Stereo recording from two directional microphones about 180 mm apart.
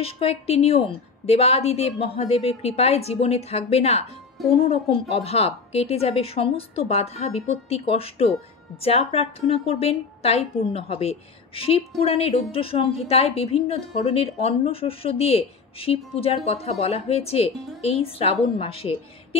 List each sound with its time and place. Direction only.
0.0 s a woman's voice: 35° left (ahead or behind)